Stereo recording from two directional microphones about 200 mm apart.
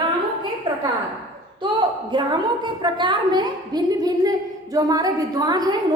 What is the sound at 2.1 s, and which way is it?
A woman's voice, 25° right (ahead or behind).